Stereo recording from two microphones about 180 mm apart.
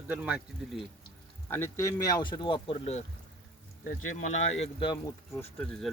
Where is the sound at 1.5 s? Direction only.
10° left (ahead or behind); by 4.4 s 45° left (ahead or behind).